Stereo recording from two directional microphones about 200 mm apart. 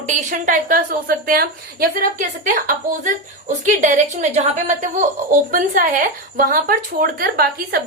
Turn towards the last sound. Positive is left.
turn(degrees=-50)  # may be behind; listen again after turning